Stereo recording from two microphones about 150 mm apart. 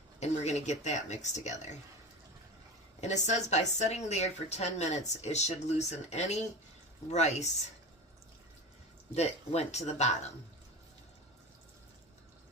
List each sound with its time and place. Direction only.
0.2 s a woman's voice: 50° left (ahead or behind)
3.0 s a woman's voice: 50° left (ahead or behind)
9.1 s a woman's voice: 45° left (ahead or behind)